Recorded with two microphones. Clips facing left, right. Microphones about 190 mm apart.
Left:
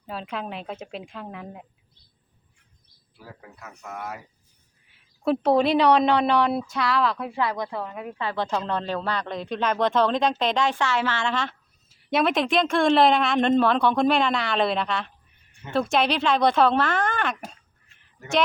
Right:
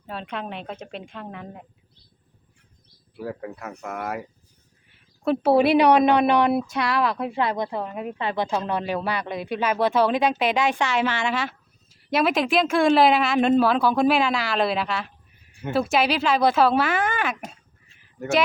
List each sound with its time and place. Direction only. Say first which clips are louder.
0.1 s speech: even; centre (ahead or behind)
3.2 s speech: right 13 dB; 65° right (ahead or behind)
4.9 s a woman's voice: even; centre (ahead or behind)